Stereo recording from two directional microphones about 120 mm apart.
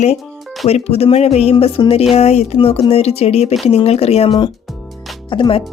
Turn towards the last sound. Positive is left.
turn(degrees=40)  # may be behind; listen again after turning